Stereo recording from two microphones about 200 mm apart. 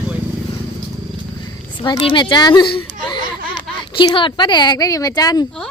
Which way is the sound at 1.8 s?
25° left (ahead or behind).